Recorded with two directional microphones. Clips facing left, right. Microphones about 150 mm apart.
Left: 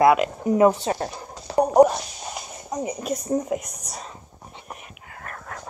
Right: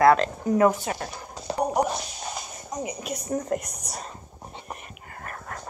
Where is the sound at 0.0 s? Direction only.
15° left (ahead or behind); by 1.1 s 30° left (ahead or behind).